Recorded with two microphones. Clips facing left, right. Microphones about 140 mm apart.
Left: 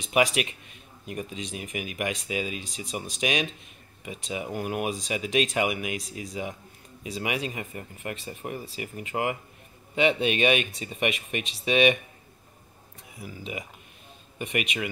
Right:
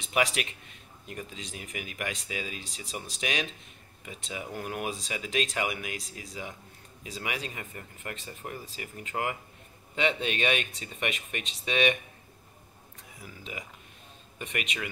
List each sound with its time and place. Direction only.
0.1 s speech: 15° left (ahead or behind)
13.2 s speech: 10° left (ahead or behind)